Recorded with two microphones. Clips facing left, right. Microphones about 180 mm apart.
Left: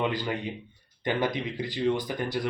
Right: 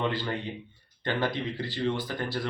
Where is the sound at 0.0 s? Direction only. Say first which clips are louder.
Left 1 dB; 15° left (ahead or behind).